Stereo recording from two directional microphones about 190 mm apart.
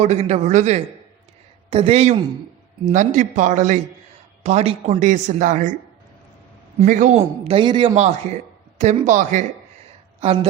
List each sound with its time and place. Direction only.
0.0 s speech: 35° right (ahead or behind)
6.7 s speech: 40° right (ahead or behind); by 7.9 s 25° right (ahead or behind)
7.9 s a woman's voice: 35° right (ahead or behind)